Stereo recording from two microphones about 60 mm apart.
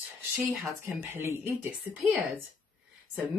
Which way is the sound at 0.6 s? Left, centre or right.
Right.